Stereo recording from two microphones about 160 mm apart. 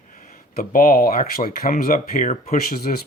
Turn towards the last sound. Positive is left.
turn(degrees=70)  # may be behind; listen again after turning